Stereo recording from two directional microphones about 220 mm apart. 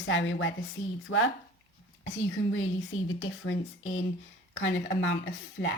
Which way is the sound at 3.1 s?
60° left (ahead or behind).